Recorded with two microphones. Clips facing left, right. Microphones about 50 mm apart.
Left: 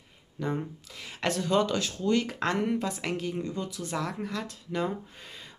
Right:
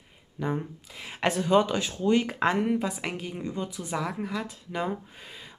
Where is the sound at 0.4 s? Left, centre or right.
Centre.